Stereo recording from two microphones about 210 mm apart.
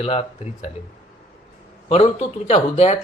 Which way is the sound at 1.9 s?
30° left (ahead or behind).